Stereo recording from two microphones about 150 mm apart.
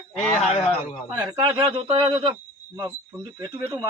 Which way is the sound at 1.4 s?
35° right (ahead or behind).